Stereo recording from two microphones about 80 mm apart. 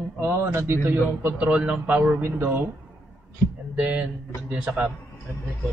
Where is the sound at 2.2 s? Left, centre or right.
Right.